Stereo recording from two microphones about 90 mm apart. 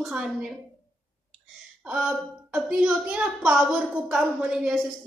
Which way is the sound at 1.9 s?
10° right (ahead or behind).